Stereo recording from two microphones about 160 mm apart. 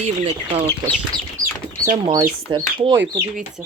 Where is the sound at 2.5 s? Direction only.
30° right (ahead or behind).